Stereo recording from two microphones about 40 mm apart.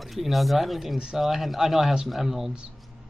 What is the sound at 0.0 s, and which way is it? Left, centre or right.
Speech, centre.